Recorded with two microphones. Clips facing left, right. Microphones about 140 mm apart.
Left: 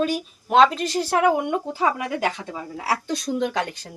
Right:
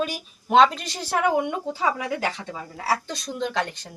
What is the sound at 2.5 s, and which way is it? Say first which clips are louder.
Speech: even; 10° left (ahead or behind).